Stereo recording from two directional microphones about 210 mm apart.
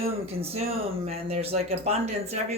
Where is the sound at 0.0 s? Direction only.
30° right (ahead or behind).